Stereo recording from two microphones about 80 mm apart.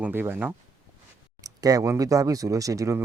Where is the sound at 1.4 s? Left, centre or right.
Right.